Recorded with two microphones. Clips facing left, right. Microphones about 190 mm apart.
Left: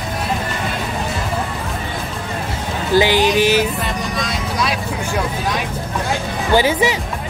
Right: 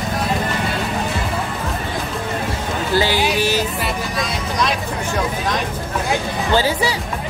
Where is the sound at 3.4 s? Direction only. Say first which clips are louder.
Left 4 dB; 15° left (ahead or behind).